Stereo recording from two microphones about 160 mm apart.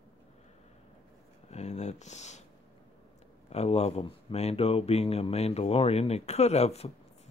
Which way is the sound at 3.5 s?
40° left (ahead or behind).